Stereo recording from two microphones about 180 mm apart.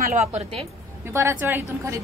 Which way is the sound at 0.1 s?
40° right (ahead or behind).